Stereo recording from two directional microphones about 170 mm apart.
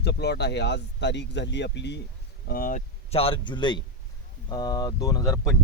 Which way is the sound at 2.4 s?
55° left (ahead or behind).